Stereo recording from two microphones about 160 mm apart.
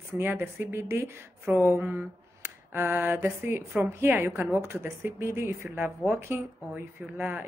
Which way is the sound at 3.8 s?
15° right (ahead or behind).